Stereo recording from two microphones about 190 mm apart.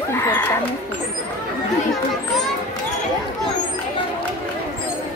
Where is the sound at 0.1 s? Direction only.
10° left (ahead or behind).